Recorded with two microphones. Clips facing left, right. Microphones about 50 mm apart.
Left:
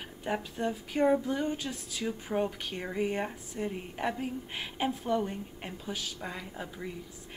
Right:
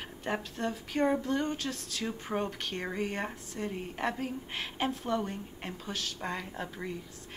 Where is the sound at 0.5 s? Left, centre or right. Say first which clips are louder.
Left 1 dB; centre.